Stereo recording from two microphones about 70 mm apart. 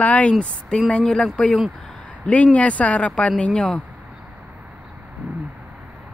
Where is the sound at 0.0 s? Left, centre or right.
Centre.